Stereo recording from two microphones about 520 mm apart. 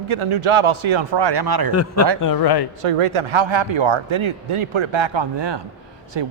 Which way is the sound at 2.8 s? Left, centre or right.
Right.